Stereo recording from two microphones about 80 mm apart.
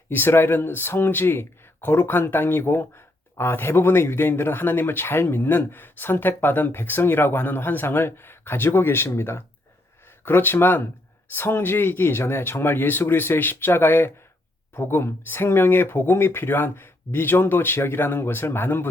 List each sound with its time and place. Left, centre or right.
0.1 s speech: left